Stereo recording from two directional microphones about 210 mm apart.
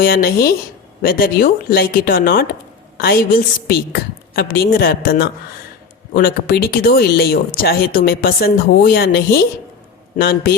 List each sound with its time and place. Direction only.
0.0 s speech: 45° left (ahead or behind)